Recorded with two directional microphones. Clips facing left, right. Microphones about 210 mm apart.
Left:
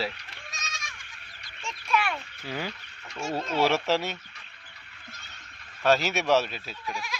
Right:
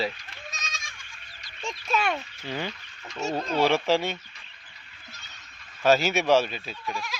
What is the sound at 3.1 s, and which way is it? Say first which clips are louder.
Speech: right 2 dB; 20° right (ahead or behind).